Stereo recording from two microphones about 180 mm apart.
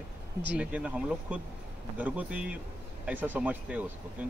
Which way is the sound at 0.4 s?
10° right (ahead or behind).